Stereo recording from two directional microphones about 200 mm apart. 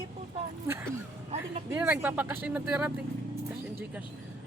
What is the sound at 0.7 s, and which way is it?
Speech, 10° right (ahead or behind).